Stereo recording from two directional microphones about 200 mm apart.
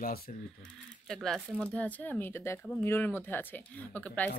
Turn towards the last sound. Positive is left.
turn(degrees=5)  # may be behind; listen again after turning